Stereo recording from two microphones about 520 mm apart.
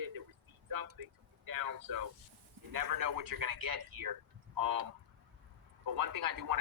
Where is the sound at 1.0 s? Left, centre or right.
Right.